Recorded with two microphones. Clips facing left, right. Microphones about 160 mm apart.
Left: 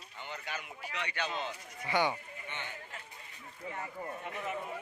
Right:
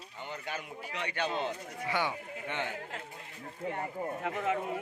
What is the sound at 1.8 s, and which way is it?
Speech, centre (ahead or behind).